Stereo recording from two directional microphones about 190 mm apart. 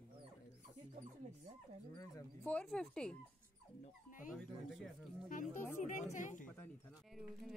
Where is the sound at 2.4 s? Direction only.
5° left (ahead or behind).